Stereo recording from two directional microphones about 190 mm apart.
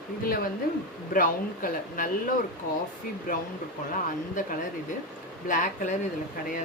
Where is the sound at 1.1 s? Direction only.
45° left (ahead or behind).